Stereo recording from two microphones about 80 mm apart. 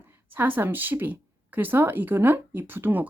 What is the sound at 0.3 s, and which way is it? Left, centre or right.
Speech, right.